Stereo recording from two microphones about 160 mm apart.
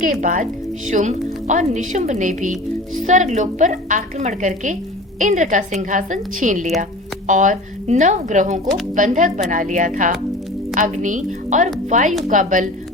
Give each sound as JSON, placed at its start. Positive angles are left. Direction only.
{"t": 0.0, "sound": "speech", "side_deg": -55}